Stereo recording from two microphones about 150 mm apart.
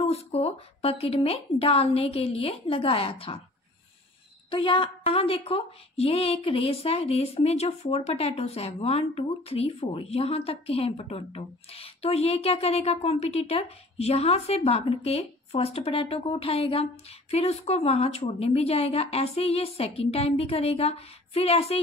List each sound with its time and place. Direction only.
0.0 s a woman's voice: 40° left (ahead or behind)
4.5 s a woman's voice: 35° left (ahead or behind)